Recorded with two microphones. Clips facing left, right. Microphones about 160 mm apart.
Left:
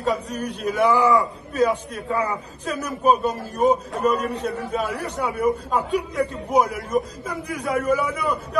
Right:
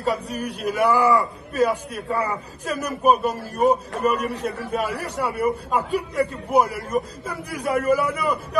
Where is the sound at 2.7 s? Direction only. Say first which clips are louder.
Even; 10° right (ahead or behind).